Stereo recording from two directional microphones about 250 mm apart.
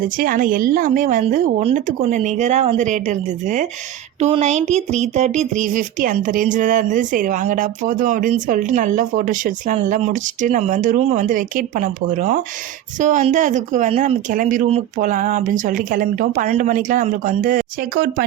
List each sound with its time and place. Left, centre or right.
0.0 s a woman's voice: right